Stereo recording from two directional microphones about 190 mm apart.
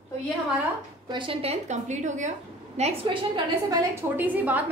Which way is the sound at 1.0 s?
25° right (ahead or behind).